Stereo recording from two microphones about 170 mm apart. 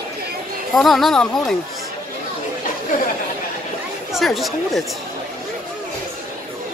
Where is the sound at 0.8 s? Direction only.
Centre (ahead or behind).